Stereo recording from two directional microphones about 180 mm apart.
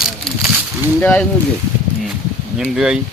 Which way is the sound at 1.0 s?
10° left (ahead or behind).